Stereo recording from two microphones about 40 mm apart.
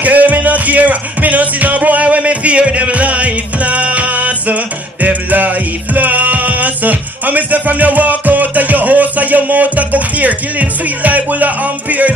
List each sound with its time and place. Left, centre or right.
0.0 s music: right